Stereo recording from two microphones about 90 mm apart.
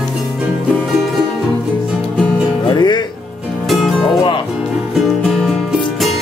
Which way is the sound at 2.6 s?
55° left (ahead or behind).